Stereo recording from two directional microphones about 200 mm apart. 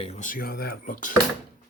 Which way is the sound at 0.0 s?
35° left (ahead or behind).